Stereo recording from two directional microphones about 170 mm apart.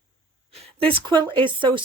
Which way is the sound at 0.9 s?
30° right (ahead or behind).